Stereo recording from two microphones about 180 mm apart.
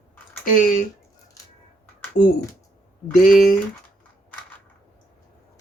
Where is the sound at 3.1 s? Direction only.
45° left (ahead or behind).